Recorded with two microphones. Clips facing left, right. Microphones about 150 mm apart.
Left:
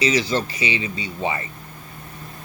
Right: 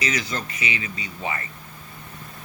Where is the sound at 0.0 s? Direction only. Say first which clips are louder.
Left 7 dB; 30° left (ahead or behind).